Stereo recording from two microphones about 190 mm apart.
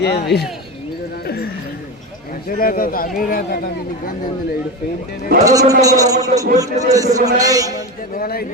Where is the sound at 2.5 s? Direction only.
50° left (ahead or behind).